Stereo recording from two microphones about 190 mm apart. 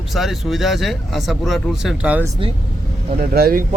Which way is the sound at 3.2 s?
50° right (ahead or behind).